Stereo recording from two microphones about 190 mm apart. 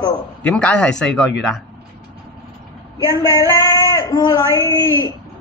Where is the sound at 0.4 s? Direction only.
5° left (ahead or behind).